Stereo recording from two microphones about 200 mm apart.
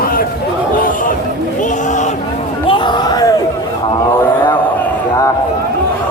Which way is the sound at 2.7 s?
25° left (ahead or behind).